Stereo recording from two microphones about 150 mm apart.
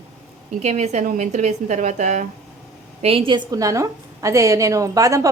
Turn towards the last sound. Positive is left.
turn(degrees=-20)  # may be behind; listen again after turning